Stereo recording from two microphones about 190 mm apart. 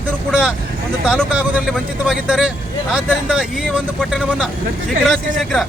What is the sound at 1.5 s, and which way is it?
Speech, 5° right (ahead or behind).